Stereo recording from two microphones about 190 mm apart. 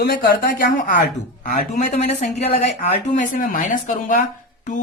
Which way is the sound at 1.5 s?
40° left (ahead or behind).